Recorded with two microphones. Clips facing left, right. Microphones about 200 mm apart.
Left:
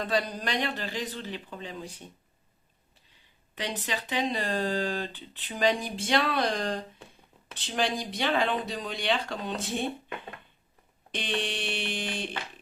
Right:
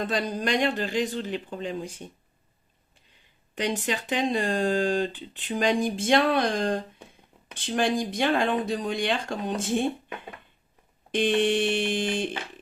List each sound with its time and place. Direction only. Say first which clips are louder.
0.0 s speech: right 2 dB; 45° right (ahead or behind)
3.5 s speech: right 6 dB; 45° right (ahead or behind)
11.1 s speech: right 10 dB; 50° right (ahead or behind)